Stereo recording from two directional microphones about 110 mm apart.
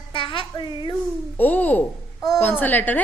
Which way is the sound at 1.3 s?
15° left (ahead or behind).